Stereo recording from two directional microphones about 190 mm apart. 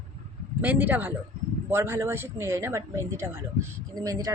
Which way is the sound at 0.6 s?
10° right (ahead or behind).